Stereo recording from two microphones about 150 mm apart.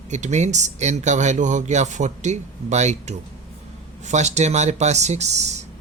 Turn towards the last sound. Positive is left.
turn(degrees=-50)  # may be behind; listen again after turning